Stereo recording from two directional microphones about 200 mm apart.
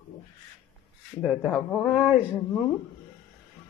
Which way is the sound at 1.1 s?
Centre (ahead or behind).